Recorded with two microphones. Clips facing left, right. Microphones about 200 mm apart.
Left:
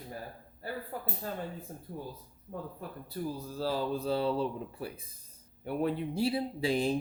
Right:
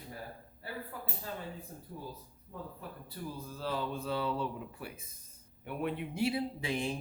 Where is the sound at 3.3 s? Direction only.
35° left (ahead or behind).